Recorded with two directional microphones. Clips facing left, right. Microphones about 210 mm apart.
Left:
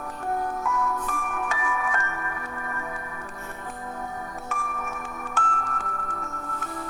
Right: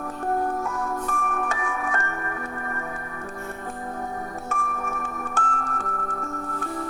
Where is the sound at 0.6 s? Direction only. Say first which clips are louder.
Even; 40° right (ahead or behind).